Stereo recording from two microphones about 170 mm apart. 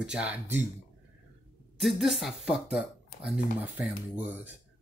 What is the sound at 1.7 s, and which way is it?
Speech, centre (ahead or behind).